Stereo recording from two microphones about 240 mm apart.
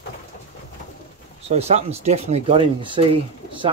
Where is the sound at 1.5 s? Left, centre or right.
Right.